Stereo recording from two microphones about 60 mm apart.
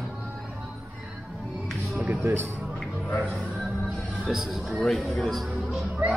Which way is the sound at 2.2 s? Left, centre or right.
Right.